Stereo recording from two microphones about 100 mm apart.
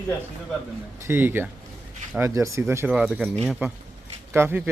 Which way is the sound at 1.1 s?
20° right (ahead or behind).